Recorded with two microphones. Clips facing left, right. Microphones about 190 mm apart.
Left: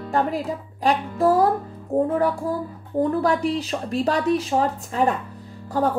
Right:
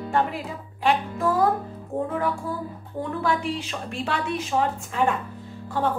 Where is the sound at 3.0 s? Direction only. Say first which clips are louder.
Left 6 dB; 40° left (ahead or behind).